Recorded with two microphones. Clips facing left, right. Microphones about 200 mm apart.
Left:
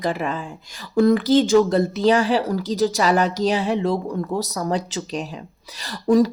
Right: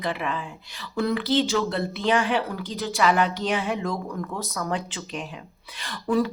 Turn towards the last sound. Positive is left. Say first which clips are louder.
# left 7 dB
turn(degrees=40)  # may be behind; listen again after turning